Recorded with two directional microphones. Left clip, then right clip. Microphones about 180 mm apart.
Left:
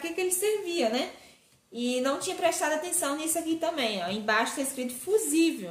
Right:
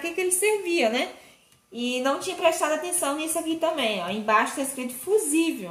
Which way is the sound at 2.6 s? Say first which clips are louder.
Right 3 dB; 15° right (ahead or behind).